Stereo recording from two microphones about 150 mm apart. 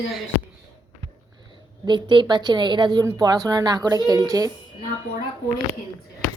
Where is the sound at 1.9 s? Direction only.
30° right (ahead or behind).